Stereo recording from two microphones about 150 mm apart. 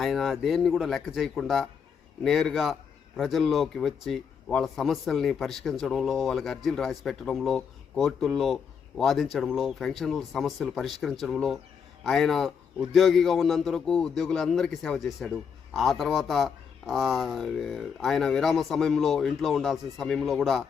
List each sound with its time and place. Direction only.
0.0 s speech: centre (ahead or behind)